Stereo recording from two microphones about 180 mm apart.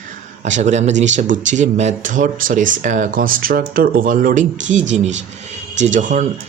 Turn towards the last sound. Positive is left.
turn(degrees=-45)  # may be behind; listen again after turning